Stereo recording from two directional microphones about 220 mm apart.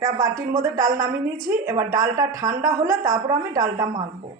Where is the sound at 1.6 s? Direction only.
10° right (ahead or behind).